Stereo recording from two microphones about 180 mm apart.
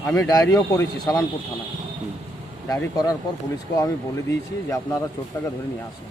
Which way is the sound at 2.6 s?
20° left (ahead or behind).